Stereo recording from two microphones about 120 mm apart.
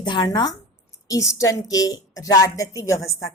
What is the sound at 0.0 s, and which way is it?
A woman's voice, 40° left (ahead or behind).